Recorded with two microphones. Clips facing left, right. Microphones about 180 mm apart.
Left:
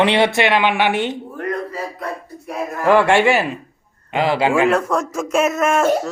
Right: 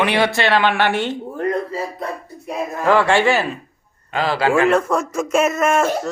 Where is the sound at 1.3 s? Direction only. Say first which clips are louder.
Right 3 dB; 25° right (ahead or behind).